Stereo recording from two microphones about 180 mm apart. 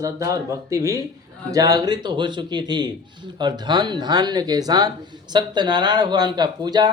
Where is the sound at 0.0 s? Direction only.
20° right (ahead or behind).